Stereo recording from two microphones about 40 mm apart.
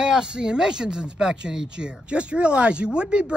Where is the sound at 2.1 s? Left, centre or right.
Right.